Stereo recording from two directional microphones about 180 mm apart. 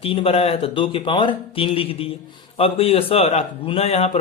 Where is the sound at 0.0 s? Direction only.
30° left (ahead or behind).